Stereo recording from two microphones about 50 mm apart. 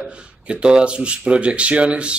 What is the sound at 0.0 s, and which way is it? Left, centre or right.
Speech, right.